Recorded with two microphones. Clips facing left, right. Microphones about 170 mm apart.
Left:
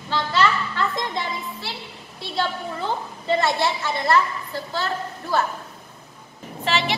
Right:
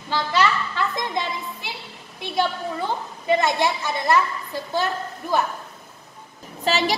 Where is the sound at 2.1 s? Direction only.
15° right (ahead or behind).